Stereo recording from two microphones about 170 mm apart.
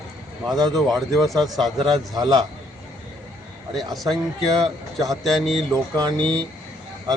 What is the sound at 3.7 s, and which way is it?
A man's voice, centre (ahead or behind).